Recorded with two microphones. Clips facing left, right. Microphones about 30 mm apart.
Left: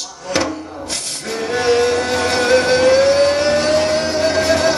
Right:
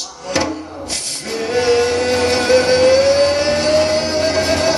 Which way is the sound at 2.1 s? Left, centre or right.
Right.